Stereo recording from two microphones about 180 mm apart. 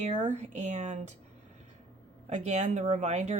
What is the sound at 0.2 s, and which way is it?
Speech, 40° right (ahead or behind).